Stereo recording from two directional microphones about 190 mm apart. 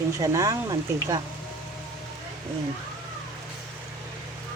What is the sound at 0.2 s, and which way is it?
Speech, 20° right (ahead or behind).